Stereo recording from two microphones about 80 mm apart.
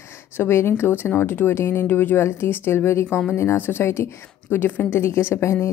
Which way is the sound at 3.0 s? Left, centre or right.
Centre.